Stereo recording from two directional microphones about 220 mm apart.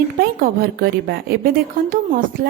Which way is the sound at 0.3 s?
45° right (ahead or behind).